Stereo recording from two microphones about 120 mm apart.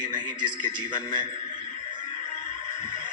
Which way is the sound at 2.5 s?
40° right (ahead or behind).